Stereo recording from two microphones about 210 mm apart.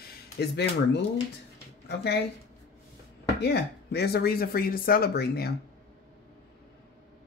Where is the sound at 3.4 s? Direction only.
50° left (ahead or behind).